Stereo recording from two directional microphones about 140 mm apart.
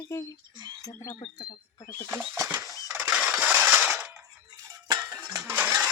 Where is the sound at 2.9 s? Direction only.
10° right (ahead or behind).